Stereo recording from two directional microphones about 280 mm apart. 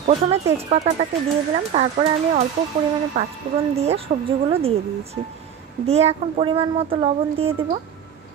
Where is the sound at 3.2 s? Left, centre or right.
Right.